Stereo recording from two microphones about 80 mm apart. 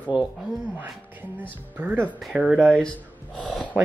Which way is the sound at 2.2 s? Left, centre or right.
Centre.